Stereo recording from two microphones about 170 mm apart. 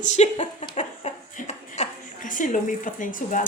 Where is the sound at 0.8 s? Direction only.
45° left (ahead or behind).